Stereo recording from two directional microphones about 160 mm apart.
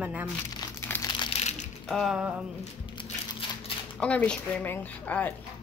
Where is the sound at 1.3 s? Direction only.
45° left (ahead or behind).